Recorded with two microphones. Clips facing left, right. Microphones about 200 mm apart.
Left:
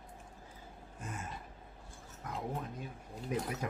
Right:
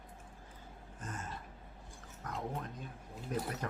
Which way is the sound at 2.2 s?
Centre (ahead or behind).